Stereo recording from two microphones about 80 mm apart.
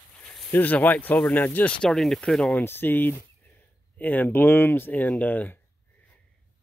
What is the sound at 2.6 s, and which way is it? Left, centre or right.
Speech, left.